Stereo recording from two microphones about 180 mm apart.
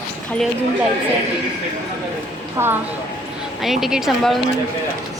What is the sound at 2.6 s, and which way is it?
Speech, 15° right (ahead or behind).